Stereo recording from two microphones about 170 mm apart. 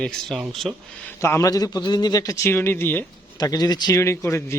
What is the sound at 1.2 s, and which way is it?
A man's voice, 15° left (ahead or behind).